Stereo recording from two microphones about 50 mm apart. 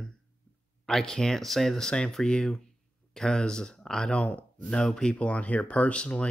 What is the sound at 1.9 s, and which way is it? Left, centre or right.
Speech, centre.